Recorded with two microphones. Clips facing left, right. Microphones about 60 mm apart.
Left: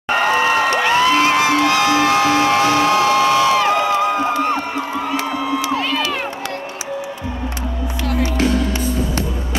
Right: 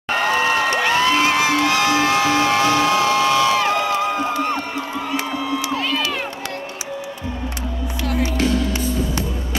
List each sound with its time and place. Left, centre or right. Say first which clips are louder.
0.1 s music: left 3 dB; left
5.2 s crowd: left 3 dB; left
8.1 s music: left 2 dB; left